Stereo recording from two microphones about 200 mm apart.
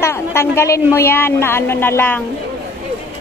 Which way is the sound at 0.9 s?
10° left (ahead or behind).